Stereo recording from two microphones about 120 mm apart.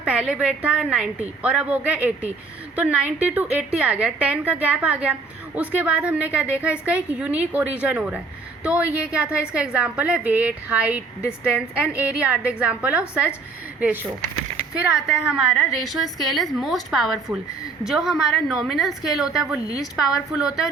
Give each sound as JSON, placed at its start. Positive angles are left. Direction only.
{"t": 0.0, "sound": "a woman's voice", "side_deg": -10}
{"t": 19.6, "sound": "a woman's voice", "side_deg": 30}
{"t": 20.1, "sound": "a woman's voice", "side_deg": -5}